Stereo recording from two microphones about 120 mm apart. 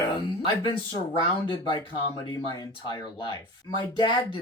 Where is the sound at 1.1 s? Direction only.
40° left (ahead or behind).